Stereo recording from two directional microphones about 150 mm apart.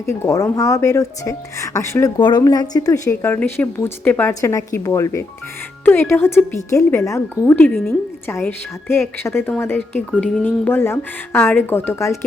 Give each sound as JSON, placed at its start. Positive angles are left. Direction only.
{"t": 0.0, "sound": "a woman's voice", "side_deg": 20}